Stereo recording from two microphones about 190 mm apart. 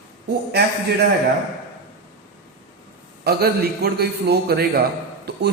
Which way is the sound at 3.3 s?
55° right (ahead or behind).